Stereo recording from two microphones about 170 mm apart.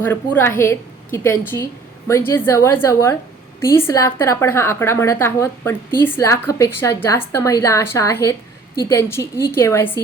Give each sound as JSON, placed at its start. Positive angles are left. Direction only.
{"t": 0.0, "sound": "a woman's voice", "side_deg": 15}